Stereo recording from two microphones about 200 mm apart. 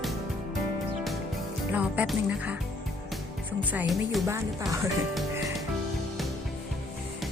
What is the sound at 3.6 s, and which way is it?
Speech, 10° right (ahead or behind).